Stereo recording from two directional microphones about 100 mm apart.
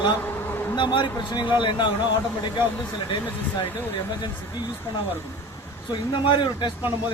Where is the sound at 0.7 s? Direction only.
50° left (ahead or behind).